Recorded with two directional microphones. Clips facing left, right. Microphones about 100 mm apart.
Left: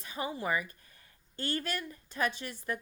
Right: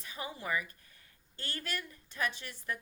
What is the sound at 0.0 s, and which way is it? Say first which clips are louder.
Speech: left 6 dB; 35° left (ahead or behind).